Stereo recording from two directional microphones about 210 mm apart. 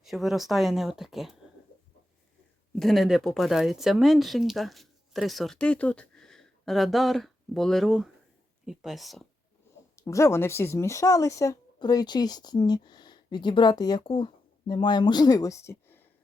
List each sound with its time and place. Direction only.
0.0 s speech: centre (ahead or behind)
2.7 s speech: centre (ahead or behind)
9.9 s speech: 15° left (ahead or behind)